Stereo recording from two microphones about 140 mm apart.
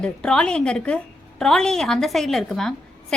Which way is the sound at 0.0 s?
5° left (ahead or behind).